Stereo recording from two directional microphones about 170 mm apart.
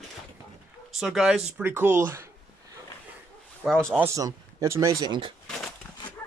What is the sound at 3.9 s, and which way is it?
Speech, 15° right (ahead or behind).